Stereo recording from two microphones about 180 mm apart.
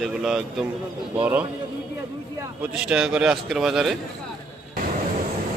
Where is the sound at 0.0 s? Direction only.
Centre (ahead or behind).